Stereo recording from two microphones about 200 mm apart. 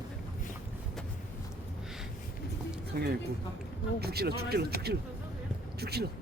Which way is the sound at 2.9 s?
55° right (ahead or behind).